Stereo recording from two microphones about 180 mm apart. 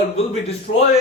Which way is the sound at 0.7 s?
50° left (ahead or behind).